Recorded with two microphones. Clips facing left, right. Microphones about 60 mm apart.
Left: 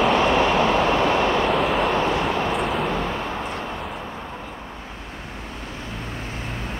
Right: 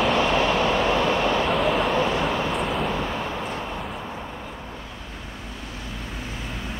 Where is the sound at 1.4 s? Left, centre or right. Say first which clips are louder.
Left 2 dB; centre.